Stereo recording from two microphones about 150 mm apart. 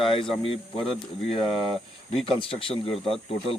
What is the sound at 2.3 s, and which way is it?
Speech, 35° left (ahead or behind).